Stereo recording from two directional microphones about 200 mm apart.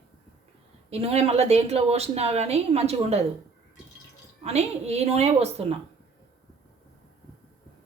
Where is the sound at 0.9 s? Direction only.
30° right (ahead or behind).